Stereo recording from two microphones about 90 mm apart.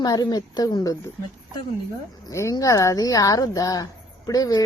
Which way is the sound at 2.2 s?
35° left (ahead or behind).